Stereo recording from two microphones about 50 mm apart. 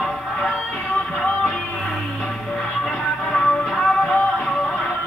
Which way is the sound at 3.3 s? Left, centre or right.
Centre.